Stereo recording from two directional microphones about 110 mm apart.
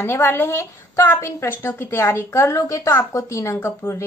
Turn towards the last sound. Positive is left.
turn(degrees=25)  # may be behind; listen again after turning